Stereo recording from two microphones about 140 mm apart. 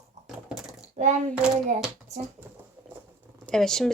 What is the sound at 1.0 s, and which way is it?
Hands, 60° right (ahead or behind).